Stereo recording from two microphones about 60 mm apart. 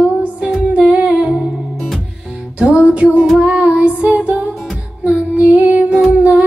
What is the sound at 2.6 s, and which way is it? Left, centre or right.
Music, centre.